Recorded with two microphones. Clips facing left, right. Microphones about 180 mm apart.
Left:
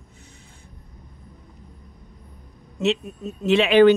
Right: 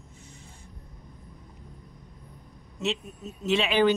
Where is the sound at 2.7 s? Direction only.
65° left (ahead or behind).